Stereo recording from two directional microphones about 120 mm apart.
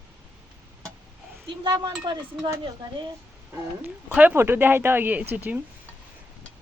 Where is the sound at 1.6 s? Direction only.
40° right (ahead or behind).